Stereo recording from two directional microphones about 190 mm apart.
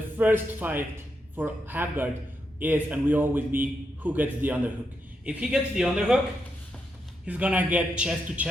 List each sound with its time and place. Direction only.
0.2 s a man's voice: 10° right (ahead or behind)
7.3 s a man's voice: 5° right (ahead or behind)